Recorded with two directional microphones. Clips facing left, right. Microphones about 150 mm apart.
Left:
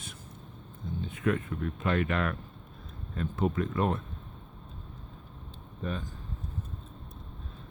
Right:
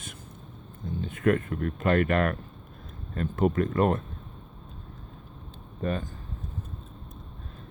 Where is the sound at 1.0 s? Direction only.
55° right (ahead or behind).